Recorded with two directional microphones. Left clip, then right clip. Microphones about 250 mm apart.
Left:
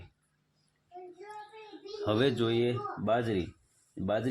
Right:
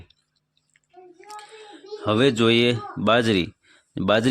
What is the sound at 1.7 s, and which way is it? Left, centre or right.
Speech, right.